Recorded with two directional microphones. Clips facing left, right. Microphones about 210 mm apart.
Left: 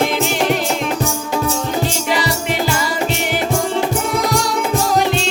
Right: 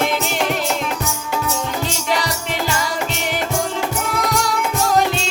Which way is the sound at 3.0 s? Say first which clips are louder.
Left 4 dB; 30° left (ahead or behind).